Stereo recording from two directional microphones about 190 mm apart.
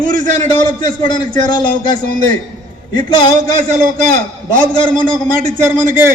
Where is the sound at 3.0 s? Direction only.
20° left (ahead or behind).